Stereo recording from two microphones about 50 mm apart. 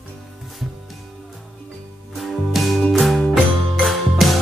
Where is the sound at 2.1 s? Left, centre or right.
Centre.